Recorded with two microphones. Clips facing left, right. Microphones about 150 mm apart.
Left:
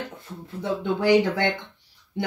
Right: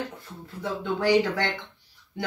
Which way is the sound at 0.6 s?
20° left (ahead or behind).